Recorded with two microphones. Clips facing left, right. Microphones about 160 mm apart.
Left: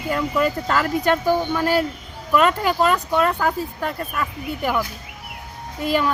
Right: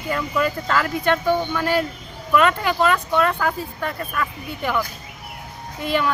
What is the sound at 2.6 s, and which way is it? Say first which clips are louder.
Speech: left 1 dB; 40° left (ahead or behind).